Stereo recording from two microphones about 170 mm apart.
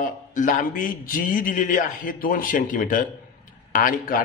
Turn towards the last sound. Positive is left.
turn(degrees=50)  # may be behind; listen again after turning